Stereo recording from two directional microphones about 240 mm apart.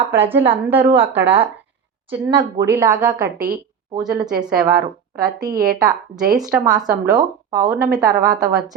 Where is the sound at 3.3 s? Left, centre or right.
Right.